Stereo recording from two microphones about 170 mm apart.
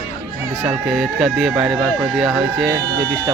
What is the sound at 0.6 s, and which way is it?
Speech, centre (ahead or behind).